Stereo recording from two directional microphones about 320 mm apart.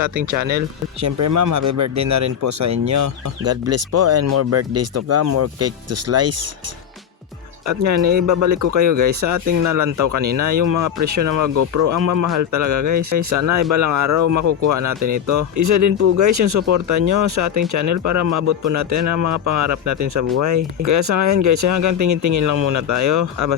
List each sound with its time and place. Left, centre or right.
0.1 s speech: right
1.0 s speech: right
8.3 s speech: right